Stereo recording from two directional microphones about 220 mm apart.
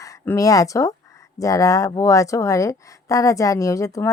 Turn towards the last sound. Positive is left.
turn(degrees=15)  # may be behind; listen again after turning